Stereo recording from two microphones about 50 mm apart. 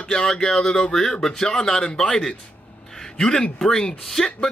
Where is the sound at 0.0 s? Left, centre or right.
Centre.